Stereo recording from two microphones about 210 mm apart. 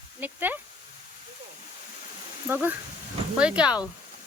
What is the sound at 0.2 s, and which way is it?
Speech, 10° right (ahead or behind).